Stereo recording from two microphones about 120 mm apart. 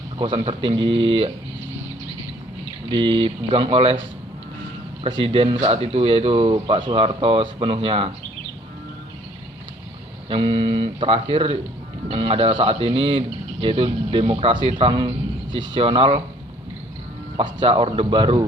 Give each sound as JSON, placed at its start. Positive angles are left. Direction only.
{"t": 0.2, "sound": "speech", "side_deg": -40}
{"t": 2.9, "sound": "speech", "side_deg": -45}
{"t": 5.0, "sound": "speech", "side_deg": -45}
{"t": 10.2, "sound": "speech", "side_deg": -50}
{"t": 17.3, "sound": "speech", "side_deg": -45}